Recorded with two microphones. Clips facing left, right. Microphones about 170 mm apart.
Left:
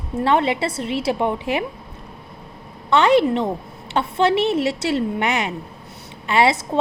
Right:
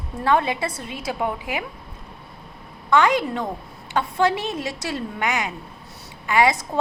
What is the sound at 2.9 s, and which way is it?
A woman's voice, 25° left (ahead or behind).